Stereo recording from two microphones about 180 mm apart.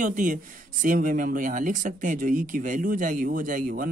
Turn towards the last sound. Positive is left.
turn(degrees=-50)  # may be behind; listen again after turning